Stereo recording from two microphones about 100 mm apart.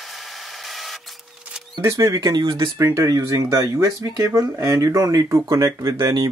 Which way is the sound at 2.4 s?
60° right (ahead or behind).